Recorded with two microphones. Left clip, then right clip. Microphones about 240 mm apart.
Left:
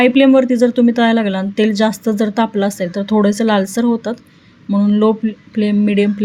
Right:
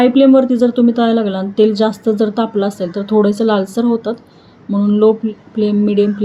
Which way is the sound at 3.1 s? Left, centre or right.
Left.